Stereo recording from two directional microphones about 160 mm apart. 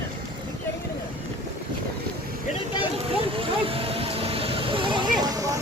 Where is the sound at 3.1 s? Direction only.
35° right (ahead or behind).